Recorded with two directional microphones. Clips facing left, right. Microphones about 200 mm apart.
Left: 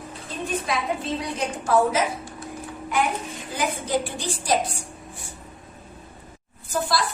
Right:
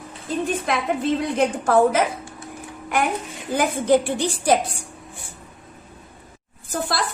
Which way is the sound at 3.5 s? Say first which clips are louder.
Right 7 dB; 55° right (ahead or behind).